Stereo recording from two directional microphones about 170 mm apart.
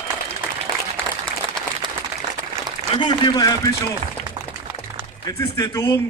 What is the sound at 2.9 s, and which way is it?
Speech, 25° left (ahead or behind).